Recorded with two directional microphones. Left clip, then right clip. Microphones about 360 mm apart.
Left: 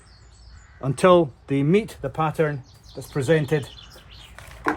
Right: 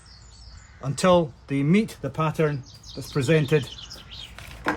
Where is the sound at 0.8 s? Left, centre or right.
Centre.